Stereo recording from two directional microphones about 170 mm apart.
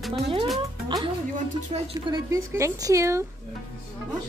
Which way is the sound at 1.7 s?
40° right (ahead or behind).